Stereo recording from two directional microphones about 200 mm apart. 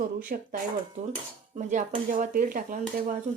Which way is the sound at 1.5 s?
40° right (ahead or behind).